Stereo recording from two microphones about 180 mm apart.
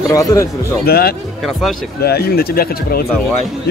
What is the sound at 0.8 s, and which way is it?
Speech, 60° left (ahead or behind).